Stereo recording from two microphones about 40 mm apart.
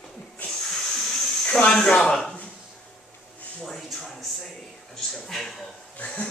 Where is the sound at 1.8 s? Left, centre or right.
Centre.